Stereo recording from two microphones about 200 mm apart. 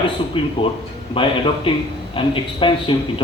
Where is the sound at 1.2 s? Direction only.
25° left (ahead or behind).